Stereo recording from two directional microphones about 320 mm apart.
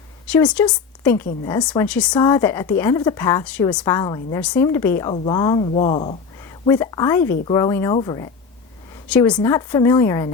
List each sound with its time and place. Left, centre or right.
0.3 s a woman's voice: centre